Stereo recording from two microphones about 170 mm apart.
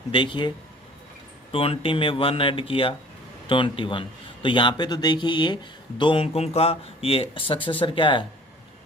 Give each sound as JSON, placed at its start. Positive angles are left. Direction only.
{"t": 0.1, "sound": "speech", "side_deg": 30}
{"t": 1.5, "sound": "speech", "side_deg": 35}